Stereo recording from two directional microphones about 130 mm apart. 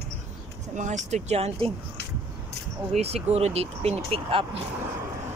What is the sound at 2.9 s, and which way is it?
Speech, 55° right (ahead or behind).